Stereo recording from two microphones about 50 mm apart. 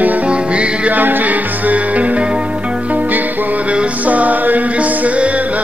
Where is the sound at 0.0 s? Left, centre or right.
Right.